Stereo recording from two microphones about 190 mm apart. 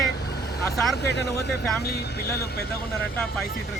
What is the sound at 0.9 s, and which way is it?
Speech, 60° left (ahead or behind).